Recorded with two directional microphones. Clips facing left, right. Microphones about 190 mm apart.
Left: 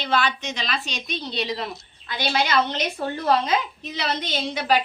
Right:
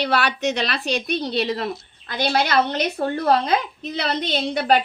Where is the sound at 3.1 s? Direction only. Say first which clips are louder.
Right 2 dB; 60° right (ahead or behind).